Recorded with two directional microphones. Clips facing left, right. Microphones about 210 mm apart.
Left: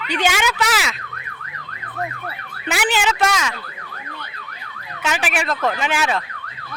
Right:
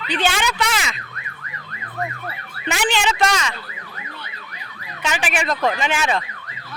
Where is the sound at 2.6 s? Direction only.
5° left (ahead or behind).